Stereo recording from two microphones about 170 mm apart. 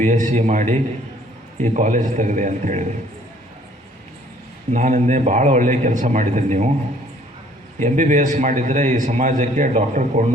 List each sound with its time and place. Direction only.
0.0 s a man's voice: 45° right (ahead or behind)
4.7 s a man's voice: 45° right (ahead or behind)
7.8 s a man's voice: 45° right (ahead or behind)